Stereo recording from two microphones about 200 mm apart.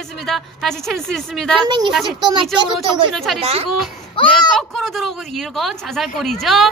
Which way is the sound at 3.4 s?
30° right (ahead or behind).